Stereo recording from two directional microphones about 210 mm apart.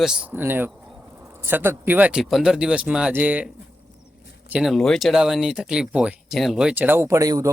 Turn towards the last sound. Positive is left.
turn(degrees=-15)  # may be behind; listen again after turning